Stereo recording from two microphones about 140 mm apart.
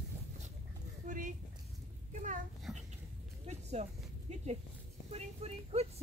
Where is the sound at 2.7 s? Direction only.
5° right (ahead or behind).